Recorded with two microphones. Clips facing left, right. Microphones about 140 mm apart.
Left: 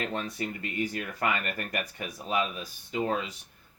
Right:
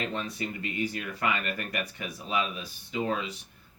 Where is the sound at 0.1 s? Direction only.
45° left (ahead or behind).